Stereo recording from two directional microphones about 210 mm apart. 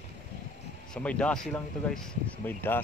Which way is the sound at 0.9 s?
5° left (ahead or behind).